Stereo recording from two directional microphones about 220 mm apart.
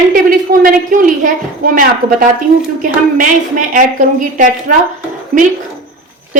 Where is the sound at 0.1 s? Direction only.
40° right (ahead or behind).